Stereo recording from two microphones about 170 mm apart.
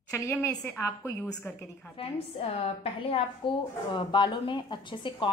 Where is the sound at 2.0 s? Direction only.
35° left (ahead or behind).